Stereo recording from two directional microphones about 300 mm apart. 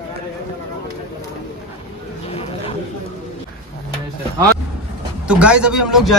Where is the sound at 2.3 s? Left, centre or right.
Centre.